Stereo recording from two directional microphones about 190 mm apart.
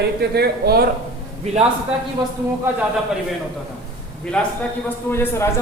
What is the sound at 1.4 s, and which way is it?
Speech, 35° right (ahead or behind).